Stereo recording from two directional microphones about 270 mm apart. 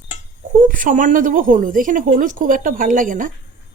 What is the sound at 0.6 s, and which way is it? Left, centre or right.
Speech, right.